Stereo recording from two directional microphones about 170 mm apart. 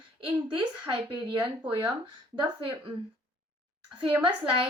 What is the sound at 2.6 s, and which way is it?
Speech, 30° right (ahead or behind).